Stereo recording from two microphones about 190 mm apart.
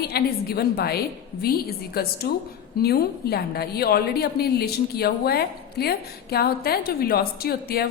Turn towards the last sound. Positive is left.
turn(degrees=55)  # may be behind; listen again after turning